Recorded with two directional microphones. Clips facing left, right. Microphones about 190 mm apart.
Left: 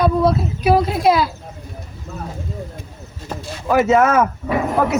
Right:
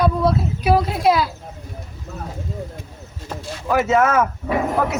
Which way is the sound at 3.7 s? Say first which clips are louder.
Left 3 dB; 25° left (ahead or behind).